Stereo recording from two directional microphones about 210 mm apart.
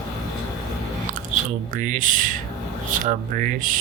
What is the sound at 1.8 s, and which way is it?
Speech, 40° right (ahead or behind).